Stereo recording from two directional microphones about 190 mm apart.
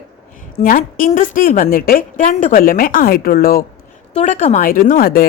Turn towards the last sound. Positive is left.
turn(degrees=50)  # may be behind; listen again after turning